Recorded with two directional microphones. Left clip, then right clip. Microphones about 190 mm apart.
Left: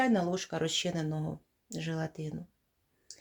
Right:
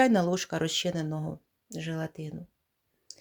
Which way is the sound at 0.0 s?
35° right (ahead or behind).